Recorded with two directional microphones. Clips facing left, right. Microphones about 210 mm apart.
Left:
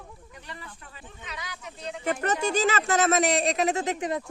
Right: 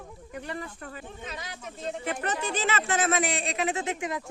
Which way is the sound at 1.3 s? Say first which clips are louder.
Right 1 dB; 25° right (ahead or behind).